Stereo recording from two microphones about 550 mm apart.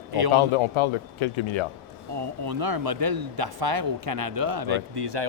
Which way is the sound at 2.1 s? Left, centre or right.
Right.